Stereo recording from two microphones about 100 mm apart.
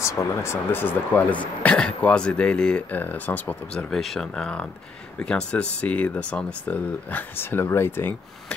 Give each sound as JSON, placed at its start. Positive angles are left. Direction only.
{"t": 0.0, "sound": "speech", "side_deg": 30}
{"t": 3.9, "sound": "speech", "side_deg": 5}